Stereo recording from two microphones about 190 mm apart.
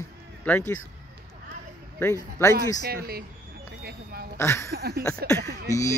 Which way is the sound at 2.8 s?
55° right (ahead or behind).